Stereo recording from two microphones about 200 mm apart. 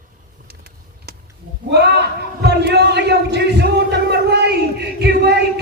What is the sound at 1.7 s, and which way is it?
Speech, 55° right (ahead or behind).